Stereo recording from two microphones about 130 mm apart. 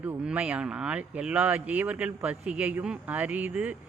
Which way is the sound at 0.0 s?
10° right (ahead or behind).